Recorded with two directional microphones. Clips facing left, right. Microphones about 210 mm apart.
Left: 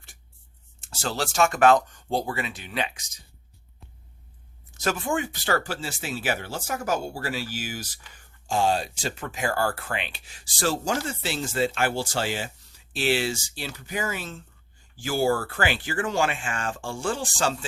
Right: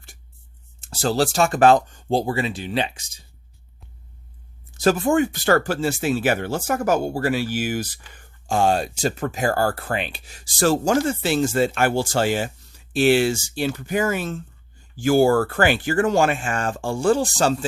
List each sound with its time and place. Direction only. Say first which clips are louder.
0.8 s speech: right 9 dB; 35° right (ahead or behind)
4.7 s speech: right 8 dB; 35° right (ahead or behind)